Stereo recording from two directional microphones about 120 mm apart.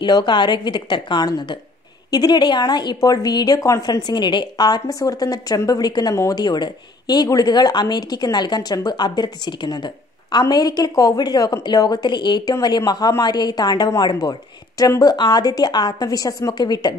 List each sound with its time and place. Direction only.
0.0 s a woman's voice: 40° left (ahead or behind)